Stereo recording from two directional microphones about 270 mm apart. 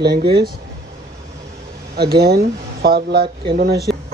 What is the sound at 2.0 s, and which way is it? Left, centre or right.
Speech, right.